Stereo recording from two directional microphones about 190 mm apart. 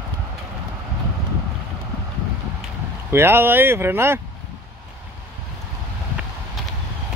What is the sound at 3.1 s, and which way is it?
Speech, 10° right (ahead or behind).